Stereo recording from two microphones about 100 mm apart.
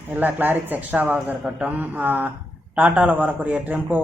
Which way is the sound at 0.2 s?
20° right (ahead or behind).